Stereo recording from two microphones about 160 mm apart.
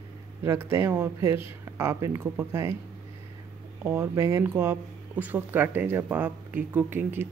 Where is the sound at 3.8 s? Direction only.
15° right (ahead or behind).